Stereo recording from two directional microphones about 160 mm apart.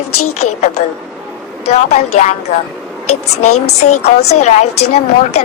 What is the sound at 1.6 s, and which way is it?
Speech, 45° left (ahead or behind).